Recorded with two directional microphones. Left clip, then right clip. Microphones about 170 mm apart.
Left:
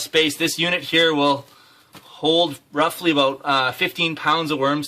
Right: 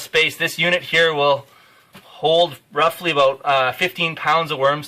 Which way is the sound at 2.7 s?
45° left (ahead or behind).